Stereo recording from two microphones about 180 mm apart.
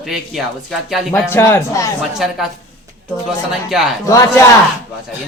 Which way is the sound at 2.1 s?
Centre (ahead or behind).